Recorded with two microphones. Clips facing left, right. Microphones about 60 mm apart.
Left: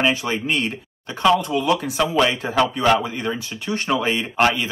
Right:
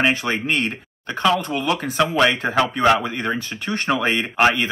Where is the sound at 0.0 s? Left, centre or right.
Right.